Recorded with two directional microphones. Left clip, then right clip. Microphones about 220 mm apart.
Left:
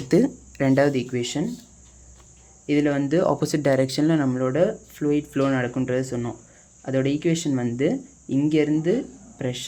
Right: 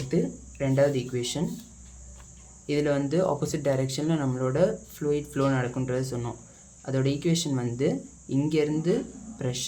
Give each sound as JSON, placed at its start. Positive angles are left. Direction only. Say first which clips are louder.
{"t": 0.1, "sound": "speech", "louder": "left 9 dB", "side_deg": 40}
{"t": 2.6, "sound": "speech", "louder": "left 4 dB", "side_deg": 20}